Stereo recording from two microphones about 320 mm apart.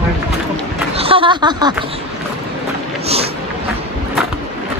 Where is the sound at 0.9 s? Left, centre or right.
Centre.